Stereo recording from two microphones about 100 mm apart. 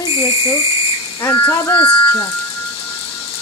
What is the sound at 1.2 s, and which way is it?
Speech, 25° left (ahead or behind).